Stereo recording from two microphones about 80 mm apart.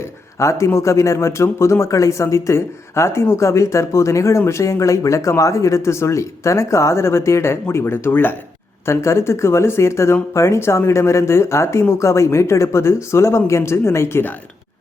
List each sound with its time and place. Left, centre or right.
0.3 s speech: left
8.9 s speech: left